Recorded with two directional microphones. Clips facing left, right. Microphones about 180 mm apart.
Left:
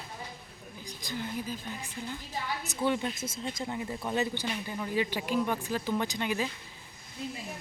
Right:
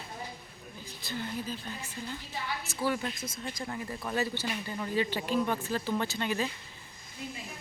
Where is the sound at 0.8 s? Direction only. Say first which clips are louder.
Left 1 dB; 15° left (ahead or behind).